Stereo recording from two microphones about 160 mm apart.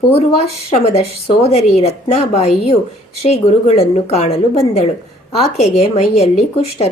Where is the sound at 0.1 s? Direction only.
40° left (ahead or behind).